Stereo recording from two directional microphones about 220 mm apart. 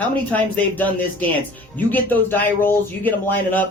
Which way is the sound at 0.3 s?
5° left (ahead or behind).